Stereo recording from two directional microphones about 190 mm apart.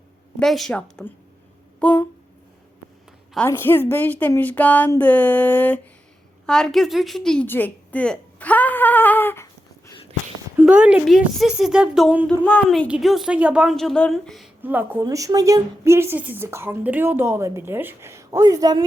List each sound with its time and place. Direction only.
0.3 s a woman's voice: centre (ahead or behind)
3.3 s a woman's voice: 10° left (ahead or behind)
10.6 s a woman's voice: 5° right (ahead or behind)